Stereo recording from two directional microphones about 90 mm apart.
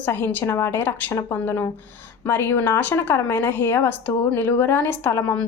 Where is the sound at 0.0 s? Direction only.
20° left (ahead or behind).